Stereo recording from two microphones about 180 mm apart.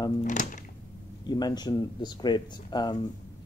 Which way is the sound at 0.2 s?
45° left (ahead or behind).